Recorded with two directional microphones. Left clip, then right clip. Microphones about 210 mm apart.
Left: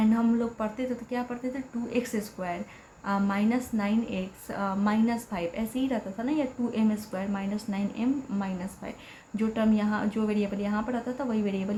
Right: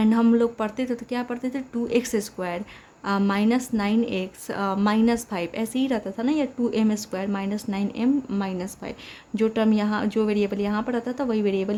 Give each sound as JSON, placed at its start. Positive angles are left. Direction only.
{"t": 0.0, "sound": "a woman's voice", "side_deg": -50}